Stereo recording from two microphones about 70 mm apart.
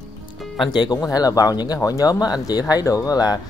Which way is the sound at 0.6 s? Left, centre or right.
Left.